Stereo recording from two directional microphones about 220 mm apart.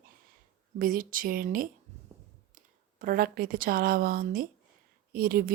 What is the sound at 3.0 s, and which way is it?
A woman's voice, 40° right (ahead or behind).